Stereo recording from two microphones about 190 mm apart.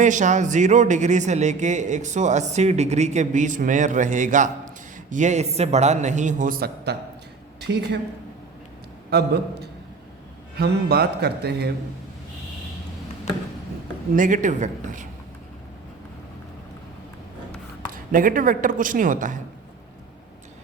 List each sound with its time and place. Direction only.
0.0 s speech: 40° right (ahead or behind)
7.6 s a woman's voice: 60° right (ahead or behind)
9.0 s a man's voice: 60° right (ahead or behind)
14.2 s speech: 45° right (ahead or behind)
17.9 s speech: 45° right (ahead or behind)